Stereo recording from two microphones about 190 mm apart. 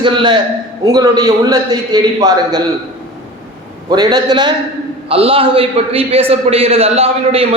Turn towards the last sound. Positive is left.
turn(degrees=-30)  # may be behind; listen again after turning